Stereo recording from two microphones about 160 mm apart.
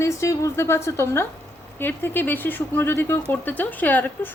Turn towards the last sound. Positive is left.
turn(degrees=10)  # may be behind; listen again after turning